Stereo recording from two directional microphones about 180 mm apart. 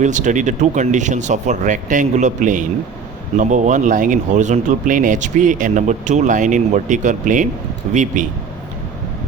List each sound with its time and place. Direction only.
0.0 s speech: 45° right (ahead or behind)